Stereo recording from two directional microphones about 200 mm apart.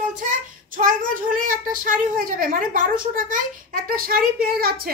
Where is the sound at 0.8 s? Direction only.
40° right (ahead or behind).